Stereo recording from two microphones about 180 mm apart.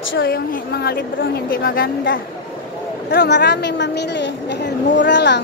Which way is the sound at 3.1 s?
70° left (ahead or behind).